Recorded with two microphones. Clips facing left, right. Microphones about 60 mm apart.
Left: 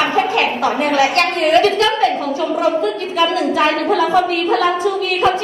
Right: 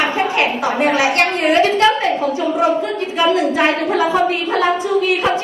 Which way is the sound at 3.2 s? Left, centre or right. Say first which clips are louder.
Right 1 dB; right.